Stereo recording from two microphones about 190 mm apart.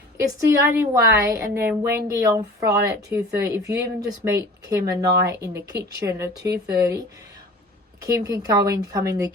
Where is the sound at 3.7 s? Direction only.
60° right (ahead or behind).